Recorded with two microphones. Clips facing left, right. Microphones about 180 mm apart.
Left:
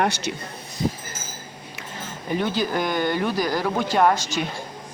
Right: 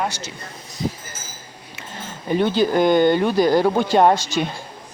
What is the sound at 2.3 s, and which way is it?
Speech, 25° right (ahead or behind).